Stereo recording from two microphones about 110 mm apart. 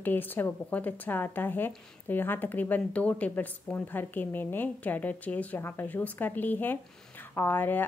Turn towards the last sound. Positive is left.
turn(degrees=20)  # may be behind; listen again after turning